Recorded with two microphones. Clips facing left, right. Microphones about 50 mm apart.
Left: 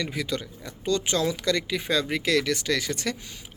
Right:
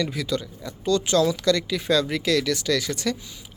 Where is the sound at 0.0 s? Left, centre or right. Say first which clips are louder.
Right 3 dB; left.